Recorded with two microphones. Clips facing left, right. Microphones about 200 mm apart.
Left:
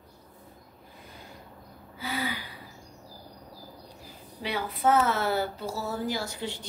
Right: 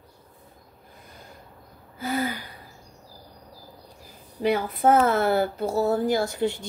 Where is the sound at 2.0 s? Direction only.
45° right (ahead or behind).